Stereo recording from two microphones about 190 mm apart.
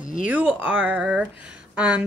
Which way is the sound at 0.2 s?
5° right (ahead or behind).